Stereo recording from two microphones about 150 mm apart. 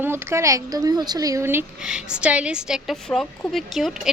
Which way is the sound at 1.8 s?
5° right (ahead or behind).